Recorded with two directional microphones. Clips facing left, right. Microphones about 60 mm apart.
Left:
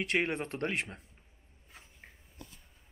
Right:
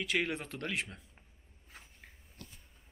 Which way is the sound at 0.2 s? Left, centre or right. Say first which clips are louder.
Left 3 dB; left.